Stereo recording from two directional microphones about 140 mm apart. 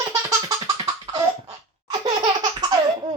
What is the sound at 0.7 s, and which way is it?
Cough, 45° right (ahead or behind).